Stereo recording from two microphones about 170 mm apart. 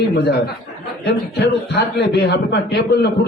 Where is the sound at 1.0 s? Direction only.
75° left (ahead or behind).